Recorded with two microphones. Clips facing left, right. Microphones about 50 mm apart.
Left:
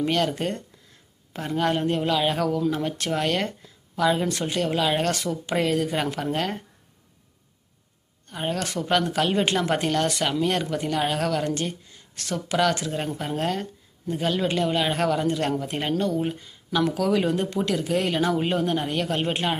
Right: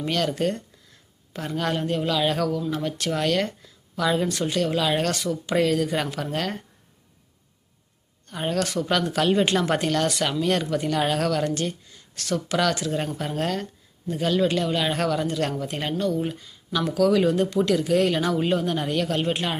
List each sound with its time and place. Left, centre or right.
0.0 s speech: centre
8.3 s speech: centre
8.5 s speech: left